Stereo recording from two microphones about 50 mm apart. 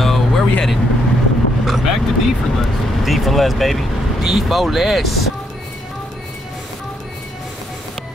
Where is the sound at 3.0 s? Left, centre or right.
Centre.